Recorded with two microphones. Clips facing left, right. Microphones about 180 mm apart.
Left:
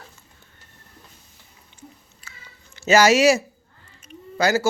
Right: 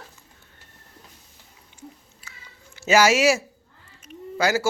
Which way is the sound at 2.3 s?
10° right (ahead or behind).